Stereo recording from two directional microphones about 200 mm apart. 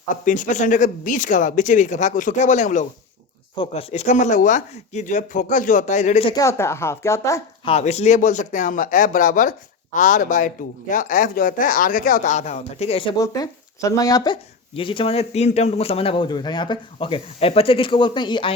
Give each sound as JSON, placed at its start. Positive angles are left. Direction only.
{"t": 0.3, "sound": "speech", "side_deg": 40}
{"t": 3.5, "sound": "speech", "side_deg": 25}
{"t": 6.3, "sound": "speech", "side_deg": 15}
{"t": 7.7, "sound": "a man's voice", "side_deg": 30}